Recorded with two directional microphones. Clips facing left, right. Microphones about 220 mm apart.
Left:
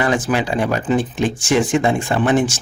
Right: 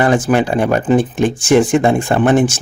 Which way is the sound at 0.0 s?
50° right (ahead or behind).